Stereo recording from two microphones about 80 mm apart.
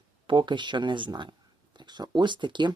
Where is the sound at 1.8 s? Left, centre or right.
Right.